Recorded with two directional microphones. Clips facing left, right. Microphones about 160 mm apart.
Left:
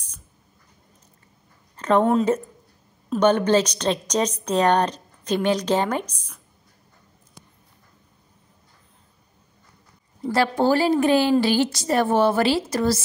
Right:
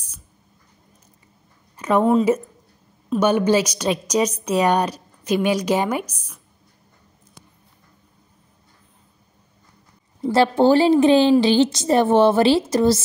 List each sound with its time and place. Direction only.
1.8 s a woman's voice: 10° right (ahead or behind)
10.2 s a woman's voice: 25° right (ahead or behind)